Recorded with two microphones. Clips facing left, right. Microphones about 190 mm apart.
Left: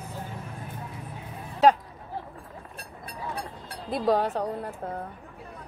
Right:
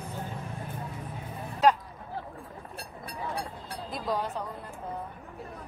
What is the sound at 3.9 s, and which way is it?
Speech, 65° left (ahead or behind).